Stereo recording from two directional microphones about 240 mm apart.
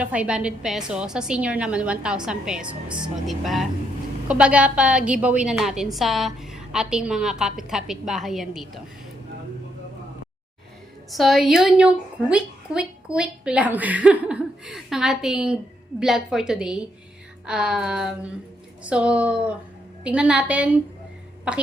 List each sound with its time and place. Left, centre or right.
0.0 s a woman's voice: centre
11.1 s a woman's voice: centre